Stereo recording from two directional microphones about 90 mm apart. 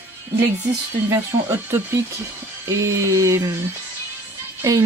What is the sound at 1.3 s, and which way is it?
Speech, 35° right (ahead or behind).